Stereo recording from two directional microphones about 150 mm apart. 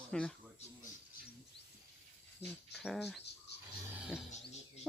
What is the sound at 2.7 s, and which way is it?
Speech, centre (ahead or behind).